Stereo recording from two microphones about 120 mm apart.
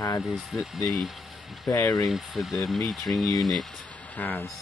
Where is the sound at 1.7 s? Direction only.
20° left (ahead or behind).